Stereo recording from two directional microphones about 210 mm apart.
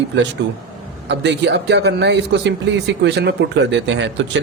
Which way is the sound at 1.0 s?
55° right (ahead or behind).